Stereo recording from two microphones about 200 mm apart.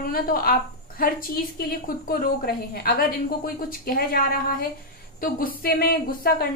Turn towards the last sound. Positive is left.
turn(degrees=50)  # may be behind; listen again after turning